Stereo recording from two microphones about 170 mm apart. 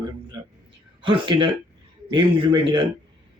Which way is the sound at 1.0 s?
30° right (ahead or behind).